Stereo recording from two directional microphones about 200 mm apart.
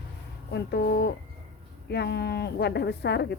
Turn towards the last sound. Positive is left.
turn(degrees=55)  # may be behind; listen again after turning